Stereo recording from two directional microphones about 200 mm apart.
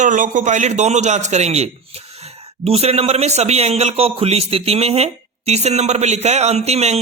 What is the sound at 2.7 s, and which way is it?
Speech, 30° right (ahead or behind).